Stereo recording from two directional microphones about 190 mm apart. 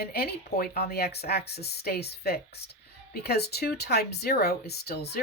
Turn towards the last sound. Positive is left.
turn(degrees=60)  # may be behind; listen again after turning